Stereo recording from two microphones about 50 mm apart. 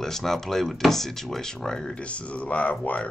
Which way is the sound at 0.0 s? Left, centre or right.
Centre.